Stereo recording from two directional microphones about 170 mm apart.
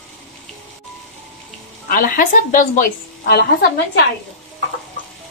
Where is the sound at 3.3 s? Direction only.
65° left (ahead or behind).